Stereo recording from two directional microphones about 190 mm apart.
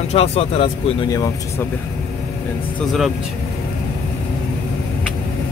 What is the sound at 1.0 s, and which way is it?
Speech, 20° left (ahead or behind).